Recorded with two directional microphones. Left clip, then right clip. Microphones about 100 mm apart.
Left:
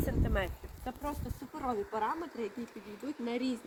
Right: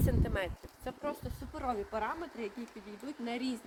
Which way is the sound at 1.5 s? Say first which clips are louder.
Left 1 dB; 30° right (ahead or behind).